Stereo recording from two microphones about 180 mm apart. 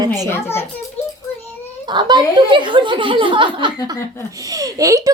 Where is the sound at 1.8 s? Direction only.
25° right (ahead or behind).